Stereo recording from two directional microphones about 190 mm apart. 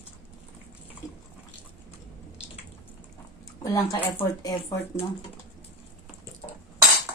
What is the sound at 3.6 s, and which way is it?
Speech, 15° left (ahead or behind).